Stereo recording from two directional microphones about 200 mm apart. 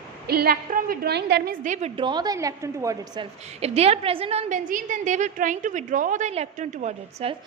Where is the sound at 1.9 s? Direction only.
25° right (ahead or behind).